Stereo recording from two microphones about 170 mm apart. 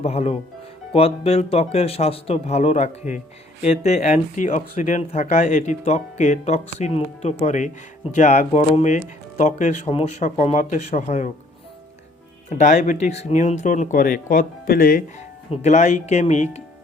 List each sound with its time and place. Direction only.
0.0 s speech: 35° left (ahead or behind)
12.5 s speech: 45° left (ahead or behind)
15.4 s speech: 40° left (ahead or behind)